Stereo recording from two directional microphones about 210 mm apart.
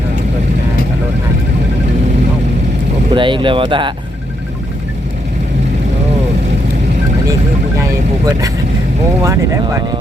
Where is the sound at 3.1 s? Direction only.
25° right (ahead or behind).